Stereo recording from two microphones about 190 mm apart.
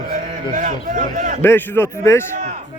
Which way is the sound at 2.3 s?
45° right (ahead or behind).